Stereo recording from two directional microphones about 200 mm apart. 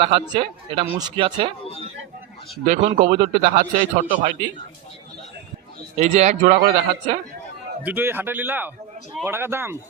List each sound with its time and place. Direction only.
0.0 s a man's voice: 25° right (ahead or behind)
2.6 s a man's voice: 40° right (ahead or behind)
6.0 s speech: 35° right (ahead or behind)
7.9 s speech: 10° right (ahead or behind)